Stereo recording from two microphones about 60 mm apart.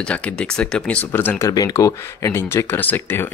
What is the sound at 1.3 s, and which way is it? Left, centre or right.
Speech, left.